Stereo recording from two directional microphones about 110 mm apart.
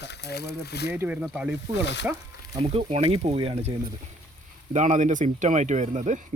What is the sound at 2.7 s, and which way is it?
Speech, 70° right (ahead or behind).